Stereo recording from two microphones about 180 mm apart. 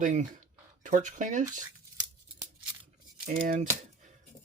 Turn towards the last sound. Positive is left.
turn(degrees=-45)  # may be behind; listen again after turning